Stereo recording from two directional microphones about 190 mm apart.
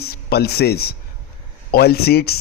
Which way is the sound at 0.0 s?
55° left (ahead or behind).